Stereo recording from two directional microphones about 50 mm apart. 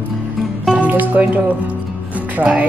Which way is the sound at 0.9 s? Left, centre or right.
Right.